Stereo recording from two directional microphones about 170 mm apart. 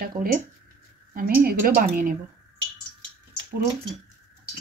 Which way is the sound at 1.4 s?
55° right (ahead or behind).